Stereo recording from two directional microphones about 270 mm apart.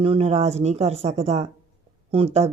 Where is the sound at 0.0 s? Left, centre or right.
Right.